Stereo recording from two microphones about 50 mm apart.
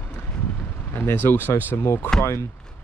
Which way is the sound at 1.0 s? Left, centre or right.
Left.